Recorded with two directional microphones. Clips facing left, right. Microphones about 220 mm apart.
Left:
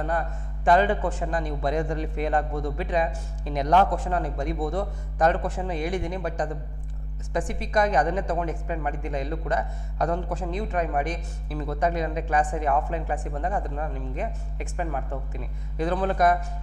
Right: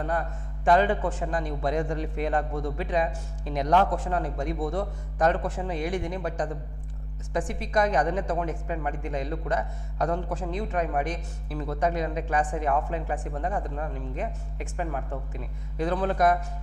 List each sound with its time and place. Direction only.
0.0 s speech: 15° left (ahead or behind)